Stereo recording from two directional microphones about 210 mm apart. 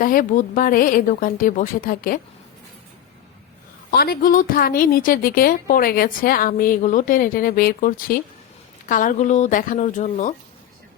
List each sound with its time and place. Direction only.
0.0 s a woman's voice: 40° left (ahead or behind)
3.9 s a woman's voice: 45° left (ahead or behind)